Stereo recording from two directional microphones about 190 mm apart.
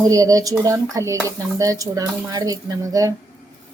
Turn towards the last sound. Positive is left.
turn(degrees=-15)  # may be behind; listen again after turning